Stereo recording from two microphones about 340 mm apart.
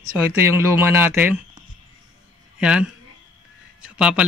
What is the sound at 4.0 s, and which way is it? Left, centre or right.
Speech, centre.